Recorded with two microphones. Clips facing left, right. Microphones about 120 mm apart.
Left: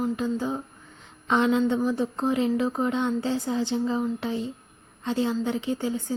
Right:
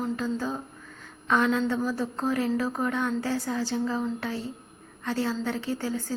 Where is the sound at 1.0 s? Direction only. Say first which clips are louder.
Left 1 dB; 20° left (ahead or behind).